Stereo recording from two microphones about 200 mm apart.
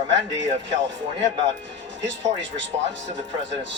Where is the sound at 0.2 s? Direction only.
65° right (ahead or behind).